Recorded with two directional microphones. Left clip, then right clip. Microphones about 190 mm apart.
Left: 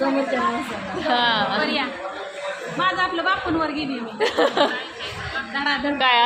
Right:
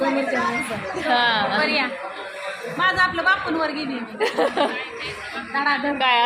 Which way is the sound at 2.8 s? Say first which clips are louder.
Right 2 dB; 45° right (ahead or behind).